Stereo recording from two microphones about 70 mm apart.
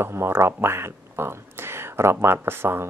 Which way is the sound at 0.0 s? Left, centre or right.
Right.